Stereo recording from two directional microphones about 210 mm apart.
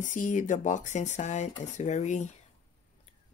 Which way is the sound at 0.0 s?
35° left (ahead or behind).